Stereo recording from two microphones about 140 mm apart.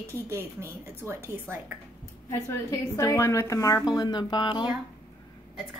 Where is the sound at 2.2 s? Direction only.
20° left (ahead or behind).